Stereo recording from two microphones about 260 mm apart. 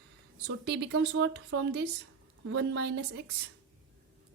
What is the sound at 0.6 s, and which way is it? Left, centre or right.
Speech, right.